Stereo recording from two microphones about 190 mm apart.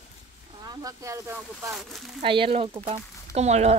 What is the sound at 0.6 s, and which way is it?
Speech, 20° right (ahead or behind).